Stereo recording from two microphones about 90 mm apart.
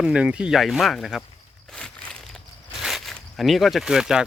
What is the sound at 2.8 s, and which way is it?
Zipper, centre (ahead or behind).